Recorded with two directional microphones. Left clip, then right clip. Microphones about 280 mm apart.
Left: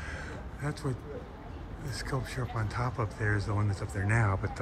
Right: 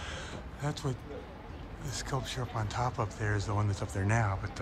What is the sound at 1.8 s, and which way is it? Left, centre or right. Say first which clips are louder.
Speech: even; centre.